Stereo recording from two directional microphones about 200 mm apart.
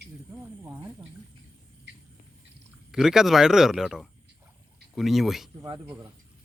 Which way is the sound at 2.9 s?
5° right (ahead or behind).